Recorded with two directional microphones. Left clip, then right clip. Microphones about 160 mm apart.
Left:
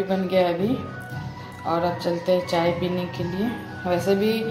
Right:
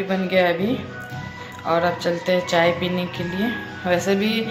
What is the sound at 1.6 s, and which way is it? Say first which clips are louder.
Speech: right 4 dB; 5° left (ahead or behind).